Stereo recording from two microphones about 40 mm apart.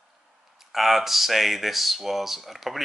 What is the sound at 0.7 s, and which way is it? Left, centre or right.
Speech, centre.